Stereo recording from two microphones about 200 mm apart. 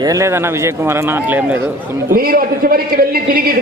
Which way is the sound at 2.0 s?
45° right (ahead or behind).